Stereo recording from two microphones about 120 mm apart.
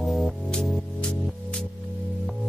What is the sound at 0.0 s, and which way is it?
Music, centre (ahead or behind).